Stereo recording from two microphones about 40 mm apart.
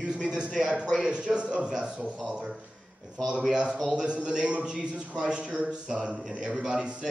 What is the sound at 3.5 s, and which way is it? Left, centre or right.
A man's voice, right.